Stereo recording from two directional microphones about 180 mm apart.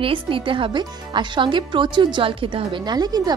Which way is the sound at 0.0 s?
30° right (ahead or behind).